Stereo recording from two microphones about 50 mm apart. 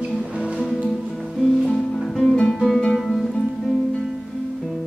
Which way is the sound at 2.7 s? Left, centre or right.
Centre.